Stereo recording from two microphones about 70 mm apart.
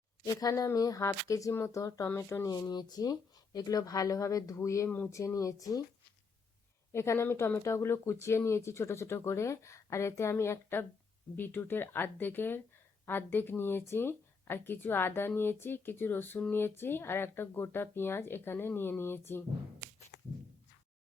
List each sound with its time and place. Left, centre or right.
0.3 s speech: left
2.0 s speech: left
2.4 s speech: left
6.9 s speech: left